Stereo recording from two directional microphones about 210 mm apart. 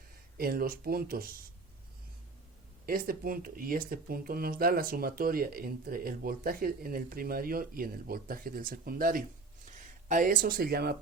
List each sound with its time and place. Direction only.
0.3 s speech: 45° right (ahead or behind)
2.8 s speech: 45° right (ahead or behind)